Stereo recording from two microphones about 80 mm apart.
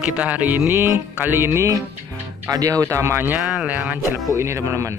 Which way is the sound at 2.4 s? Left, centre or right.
Right.